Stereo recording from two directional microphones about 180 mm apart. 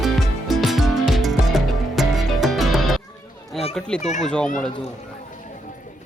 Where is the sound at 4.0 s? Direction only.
40° left (ahead or behind).